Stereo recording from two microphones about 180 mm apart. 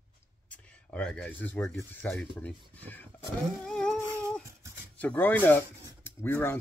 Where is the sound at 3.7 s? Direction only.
5° left (ahead or behind).